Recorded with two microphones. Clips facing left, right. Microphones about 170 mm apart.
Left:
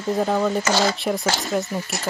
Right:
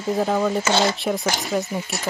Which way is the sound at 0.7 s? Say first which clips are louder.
Right 1 dB; 25° right (ahead or behind).